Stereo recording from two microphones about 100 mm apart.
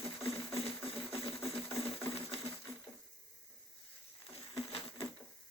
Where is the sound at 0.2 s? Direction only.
75° left (ahead or behind).